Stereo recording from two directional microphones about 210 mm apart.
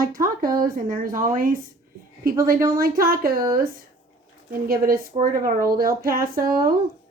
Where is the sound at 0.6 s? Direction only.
40° right (ahead or behind).